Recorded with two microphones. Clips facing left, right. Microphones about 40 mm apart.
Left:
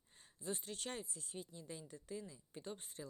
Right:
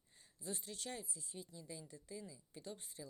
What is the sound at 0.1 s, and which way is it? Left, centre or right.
Speech, left.